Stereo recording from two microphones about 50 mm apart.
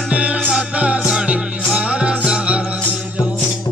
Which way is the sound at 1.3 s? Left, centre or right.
Right.